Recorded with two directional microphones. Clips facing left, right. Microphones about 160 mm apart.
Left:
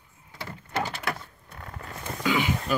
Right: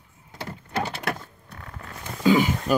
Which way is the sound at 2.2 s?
40° right (ahead or behind).